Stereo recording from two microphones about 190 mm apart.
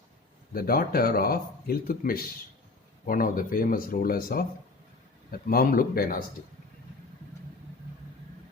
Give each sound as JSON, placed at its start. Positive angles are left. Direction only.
{"t": 0.5, "sound": "speech", "side_deg": 50}